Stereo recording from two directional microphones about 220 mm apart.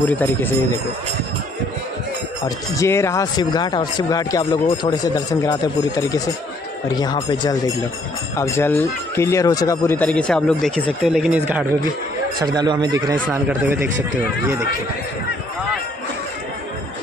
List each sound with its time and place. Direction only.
0.0 s speech: 10° left (ahead or behind)
2.4 s speech: 15° left (ahead or behind); by 11.6 s 5° right (ahead or behind)
12.4 s speech: 20° right (ahead or behind)